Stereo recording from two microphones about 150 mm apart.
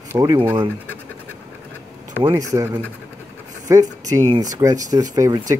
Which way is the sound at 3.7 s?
20° right (ahead or behind).